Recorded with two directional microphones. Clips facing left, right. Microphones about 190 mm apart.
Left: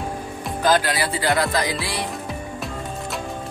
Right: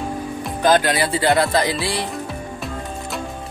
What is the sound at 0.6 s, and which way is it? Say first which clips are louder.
Music: right 3 dB; 20° right (ahead or behind).